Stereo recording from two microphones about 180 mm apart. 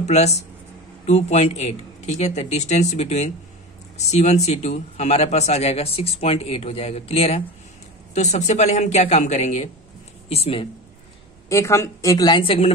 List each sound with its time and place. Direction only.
0.0 s speech: 40° left (ahead or behind)
11.4 s a woman's voice: 15° left (ahead or behind); by 12.7 s 30° left (ahead or behind)